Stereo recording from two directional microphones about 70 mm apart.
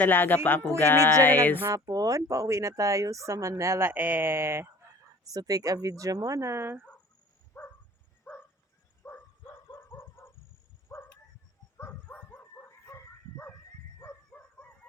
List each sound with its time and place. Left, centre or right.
0.0 s music: left
1.7 s speech: right
5.2 s speech: right
7.6 s a sound: left
8.3 s a sound: left
9.0 s dog: left
10.9 s a sound: left
12.0 s dog: left
14.3 s chicken: left